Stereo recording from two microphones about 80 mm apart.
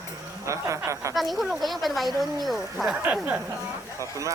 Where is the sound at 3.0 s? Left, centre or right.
Centre.